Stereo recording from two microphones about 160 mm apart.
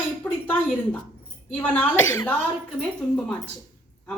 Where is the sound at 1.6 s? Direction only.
10° left (ahead or behind).